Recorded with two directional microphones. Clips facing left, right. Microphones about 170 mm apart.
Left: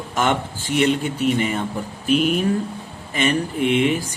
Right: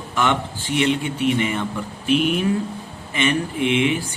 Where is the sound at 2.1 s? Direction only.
40° left (ahead or behind).